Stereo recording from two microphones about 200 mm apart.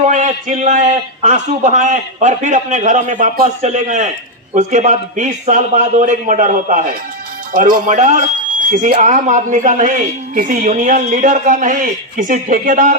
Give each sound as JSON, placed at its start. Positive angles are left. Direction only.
{"t": 0.1, "sound": "a man's voice", "side_deg": -40}